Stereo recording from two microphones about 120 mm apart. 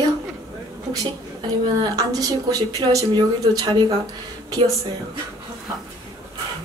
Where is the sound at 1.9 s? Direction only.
30° right (ahead or behind).